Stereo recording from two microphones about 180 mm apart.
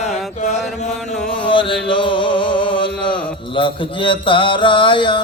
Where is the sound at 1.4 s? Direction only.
30° left (ahead or behind).